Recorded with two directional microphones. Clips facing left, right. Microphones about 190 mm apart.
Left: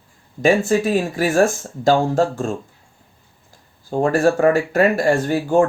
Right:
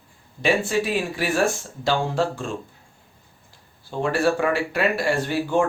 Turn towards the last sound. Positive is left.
turn(degrees=45)  # may be behind; listen again after turning